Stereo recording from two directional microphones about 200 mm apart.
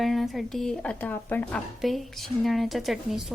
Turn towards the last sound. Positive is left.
turn(degrees=0)  # may be behind; listen again after turning